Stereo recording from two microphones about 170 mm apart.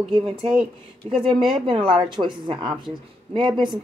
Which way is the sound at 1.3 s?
30° right (ahead or behind).